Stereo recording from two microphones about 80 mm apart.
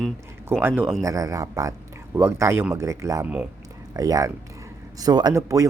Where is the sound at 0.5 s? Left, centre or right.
Right.